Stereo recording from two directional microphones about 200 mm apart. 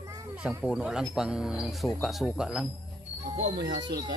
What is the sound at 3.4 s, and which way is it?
Speech, 55° right (ahead or behind).